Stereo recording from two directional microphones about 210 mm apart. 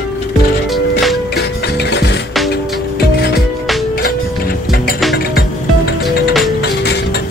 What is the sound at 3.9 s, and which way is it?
Music, 45° left (ahead or behind).